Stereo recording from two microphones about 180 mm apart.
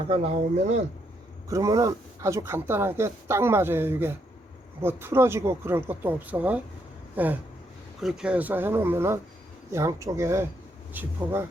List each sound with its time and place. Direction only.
0.1 s speech: 35° right (ahead or behind)
1.5 s speech: 20° right (ahead or behind)